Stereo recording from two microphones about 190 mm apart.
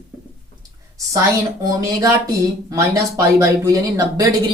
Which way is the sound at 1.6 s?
20° right (ahead or behind).